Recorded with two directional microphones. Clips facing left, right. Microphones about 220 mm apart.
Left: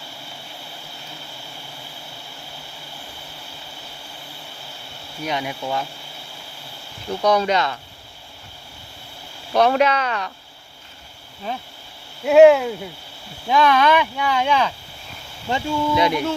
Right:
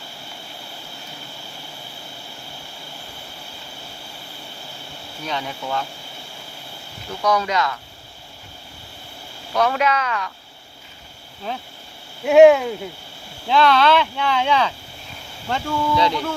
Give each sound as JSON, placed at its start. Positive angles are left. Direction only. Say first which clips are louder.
{"t": 5.2, "sound": "speech", "louder": "left 2 dB", "side_deg": 15}
{"t": 7.2, "sound": "speech", "louder": "left 2 dB", "side_deg": 30}
{"t": 9.6, "sound": "speech", "louder": "left 3 dB", "side_deg": 30}
{"t": 12.2, "sound": "speech", "louder": "even", "side_deg": 0}
{"t": 13.5, "sound": "speech", "louder": "even", "side_deg": 15}